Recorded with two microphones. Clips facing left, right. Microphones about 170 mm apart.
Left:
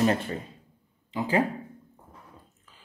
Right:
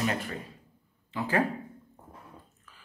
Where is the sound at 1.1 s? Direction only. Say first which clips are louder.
Left 3 dB; 15° left (ahead or behind).